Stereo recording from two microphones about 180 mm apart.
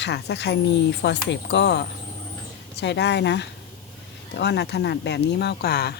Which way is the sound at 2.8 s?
75° left (ahead or behind).